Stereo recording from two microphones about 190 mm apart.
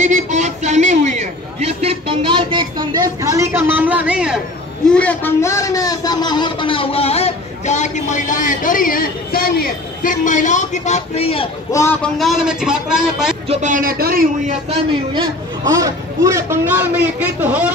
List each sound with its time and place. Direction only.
0.0 s a sound: 40° right (ahead or behind); by 4.4 s 5° right (ahead or behind)
4.8 s speech: 5° left (ahead or behind); by 11.4 s 30° left (ahead or behind)
11.7 s a man's voice: 10° left (ahead or behind)
13.5 s speech: 40° right (ahead or behind)
14.5 s speech: 30° right (ahead or behind)
15.7 s a man's voice: 15° right (ahead or behind)